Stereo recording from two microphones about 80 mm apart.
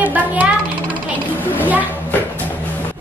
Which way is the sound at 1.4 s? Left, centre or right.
Left.